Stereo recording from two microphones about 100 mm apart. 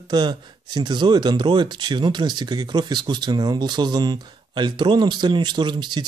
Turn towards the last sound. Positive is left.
turn(degrees=-50)  # may be behind; listen again after turning